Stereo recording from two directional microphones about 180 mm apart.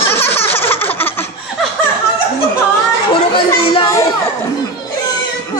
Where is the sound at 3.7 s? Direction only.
20° left (ahead or behind).